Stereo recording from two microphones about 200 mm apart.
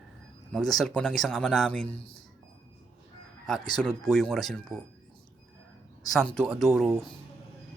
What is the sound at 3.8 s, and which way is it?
Speech, 5° left (ahead or behind).